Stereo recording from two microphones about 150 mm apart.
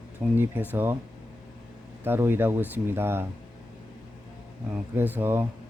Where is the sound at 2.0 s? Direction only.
15° right (ahead or behind).